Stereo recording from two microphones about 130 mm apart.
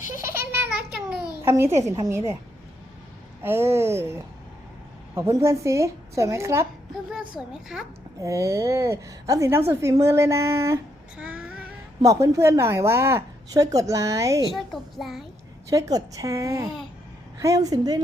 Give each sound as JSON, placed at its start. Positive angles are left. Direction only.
{"t": 0.2, "sound": "a sound", "side_deg": -15}
{"t": 1.4, "sound": "a child's voice", "side_deg": -20}
{"t": 3.4, "sound": "a woman's voice", "side_deg": -20}
{"t": 7.1, "sound": "a child's voice", "side_deg": -5}
{"t": 8.2, "sound": "a woman's voice", "side_deg": -25}
{"t": 11.2, "sound": "a sound", "side_deg": -10}
{"t": 12.0, "sound": "a woman's voice", "side_deg": -20}
{"t": 14.5, "sound": "a child's voice", "side_deg": 0}
{"t": 15.7, "sound": "a woman's voice", "side_deg": -30}